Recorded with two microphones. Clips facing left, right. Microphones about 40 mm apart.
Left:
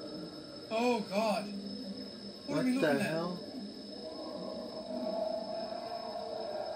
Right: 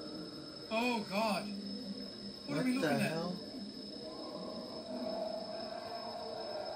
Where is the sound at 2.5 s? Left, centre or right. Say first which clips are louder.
Left 3 dB; centre.